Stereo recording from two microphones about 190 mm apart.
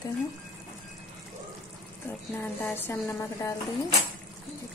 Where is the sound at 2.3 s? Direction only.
10° left (ahead or behind).